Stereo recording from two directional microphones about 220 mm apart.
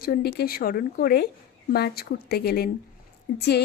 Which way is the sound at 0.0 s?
45° left (ahead or behind).